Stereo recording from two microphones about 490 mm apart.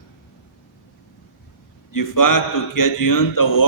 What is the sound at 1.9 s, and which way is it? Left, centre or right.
A man's voice, left.